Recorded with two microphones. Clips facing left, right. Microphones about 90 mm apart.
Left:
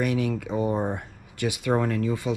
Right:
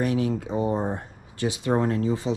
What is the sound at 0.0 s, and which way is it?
Speech, 25° right (ahead or behind).